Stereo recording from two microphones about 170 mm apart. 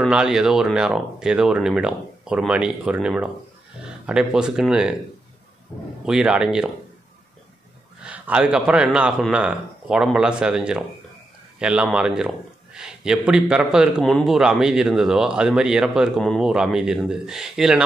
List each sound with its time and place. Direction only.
0.0 s a man's voice: 5° right (ahead or behind)
6.0 s a man's voice: 5° right (ahead or behind)
8.0 s a man's voice: 5° right (ahead or behind)